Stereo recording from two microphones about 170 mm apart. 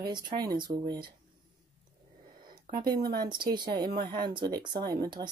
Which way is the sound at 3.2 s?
25° right (ahead or behind).